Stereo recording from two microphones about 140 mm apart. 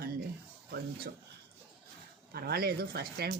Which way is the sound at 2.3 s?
90° right.